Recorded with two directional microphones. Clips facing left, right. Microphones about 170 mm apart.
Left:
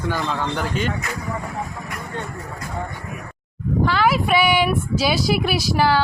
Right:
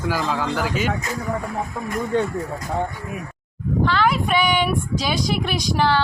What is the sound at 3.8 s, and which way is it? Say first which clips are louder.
Speech: left 1 dB; 10° left (ahead or behind).